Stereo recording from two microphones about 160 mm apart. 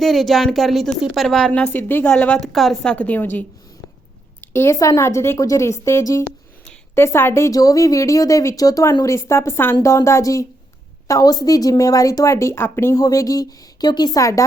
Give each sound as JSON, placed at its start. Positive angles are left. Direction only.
{"t": 0.0, "sound": "a woman's voice", "side_deg": 0}